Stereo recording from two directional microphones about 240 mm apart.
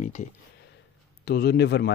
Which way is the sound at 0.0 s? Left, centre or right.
Left.